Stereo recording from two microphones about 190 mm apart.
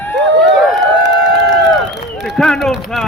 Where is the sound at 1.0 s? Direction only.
65° right (ahead or behind).